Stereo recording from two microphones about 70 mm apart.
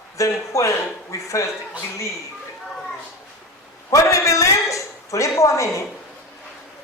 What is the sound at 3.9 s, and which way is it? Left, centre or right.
A man's voice, left.